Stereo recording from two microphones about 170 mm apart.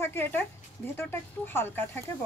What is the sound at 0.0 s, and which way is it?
Speech, 10° left (ahead or behind).